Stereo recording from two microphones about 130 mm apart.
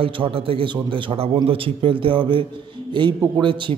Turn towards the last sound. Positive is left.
turn(degrees=-40)  # may be behind; listen again after turning